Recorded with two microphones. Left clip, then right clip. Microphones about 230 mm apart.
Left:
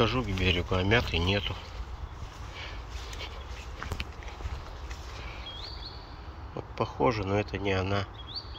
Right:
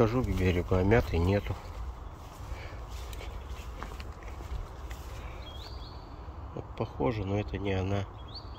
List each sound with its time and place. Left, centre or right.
0.0 s speech: right
6.5 s speech: centre